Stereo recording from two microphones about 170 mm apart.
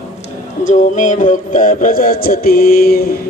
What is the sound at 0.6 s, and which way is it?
Music, 45° left (ahead or behind).